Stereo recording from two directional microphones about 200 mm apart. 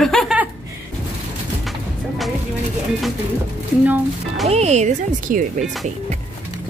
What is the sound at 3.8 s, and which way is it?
Speech, 10° right (ahead or behind).